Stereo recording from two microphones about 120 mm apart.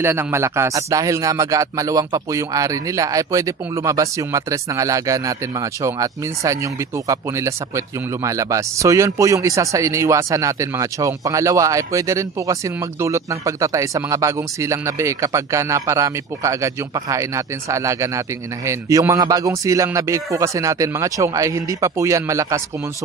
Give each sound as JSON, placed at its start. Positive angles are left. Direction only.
{"t": 0.0, "sound": "speech", "side_deg": -20}